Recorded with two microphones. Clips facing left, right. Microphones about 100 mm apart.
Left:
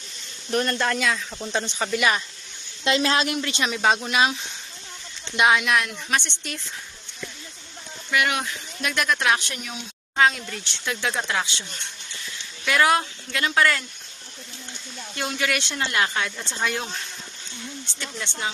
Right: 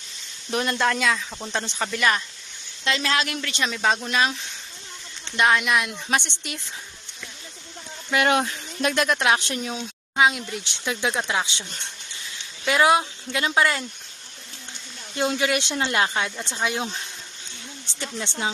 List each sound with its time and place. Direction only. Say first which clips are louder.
0.5 s speech: even; 5° right (ahead or behind)
2.8 s speech: left 3 dB; 25° left (ahead or behind); by 4.4 s 10° left (ahead or behind)
5.4 s speech: left 1 dB; 5° left (ahead or behind)
5.9 s speech: right 1 dB; 20° right (ahead or behind)
8.1 s speech: right 3 dB; 30° right (ahead or behind)
10.2 s speech: even; 10° right (ahead or behind)
12.6 s speech: right 1 dB; 20° right (ahead or behind)
15.1 s speech: right 4 dB; 25° right (ahead or behind)
18.0 s speech: right 3 dB; 25° right (ahead or behind)